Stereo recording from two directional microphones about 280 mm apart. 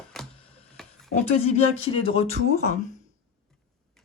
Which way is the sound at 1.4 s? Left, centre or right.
Left.